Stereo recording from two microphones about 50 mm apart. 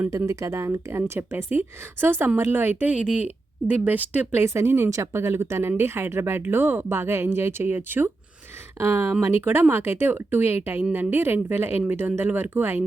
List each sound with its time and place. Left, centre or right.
0.3 s a woman's voice: right
2.7 s speech: right
4.4 s speech: right
6.8 s a woman's voice: right